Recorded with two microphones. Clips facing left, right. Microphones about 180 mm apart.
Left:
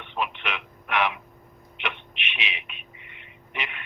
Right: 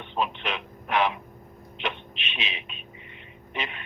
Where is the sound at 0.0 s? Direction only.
30° right (ahead or behind).